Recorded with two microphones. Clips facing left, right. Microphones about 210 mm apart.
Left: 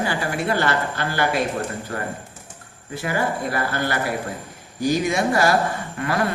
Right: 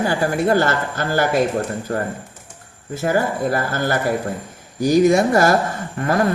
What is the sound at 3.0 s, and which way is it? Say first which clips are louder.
Speech: right 5 dB; 45° right (ahead or behind).